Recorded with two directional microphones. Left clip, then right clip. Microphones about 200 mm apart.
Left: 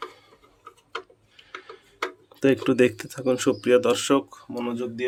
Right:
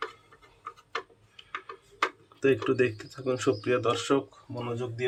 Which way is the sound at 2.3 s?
45° left (ahead or behind).